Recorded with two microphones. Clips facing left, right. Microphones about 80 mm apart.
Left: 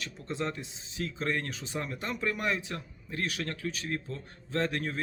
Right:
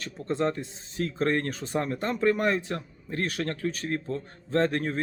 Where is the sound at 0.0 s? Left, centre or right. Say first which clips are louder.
Right 7 dB; right.